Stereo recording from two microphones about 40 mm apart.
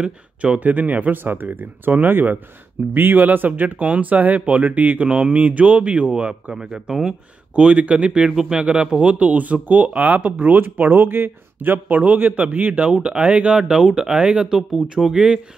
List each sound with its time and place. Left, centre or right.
0.4 s speech: right
1.1 s speech: right
6.5 s speech: centre
7.5 s speech: right
8.3 s a man's voice: centre
9.0 s speech: right
11.0 s speech: right
12.0 s speech: right
12.9 s speech: right
13.6 s a man's voice: centre